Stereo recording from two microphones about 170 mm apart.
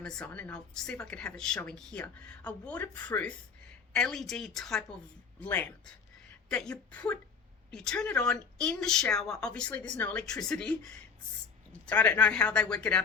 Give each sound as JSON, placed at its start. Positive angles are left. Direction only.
{"t": 0.0, "sound": "a woman's voice", "side_deg": 5}